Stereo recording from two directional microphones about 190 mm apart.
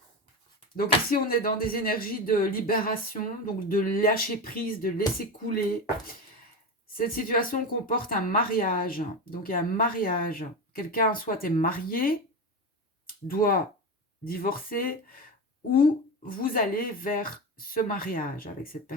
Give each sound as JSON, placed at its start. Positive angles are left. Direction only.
{"t": 0.8, "sound": "speech", "side_deg": 50}
{"t": 6.9, "sound": "speech", "side_deg": 50}
{"t": 13.2, "sound": "speech", "side_deg": 50}